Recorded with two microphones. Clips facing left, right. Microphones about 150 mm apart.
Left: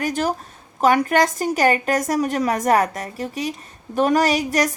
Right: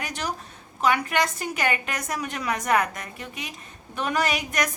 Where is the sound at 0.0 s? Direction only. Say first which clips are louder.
Left 9 dB; 45° left (ahead or behind).